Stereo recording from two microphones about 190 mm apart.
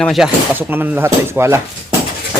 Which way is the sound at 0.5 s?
10° right (ahead or behind).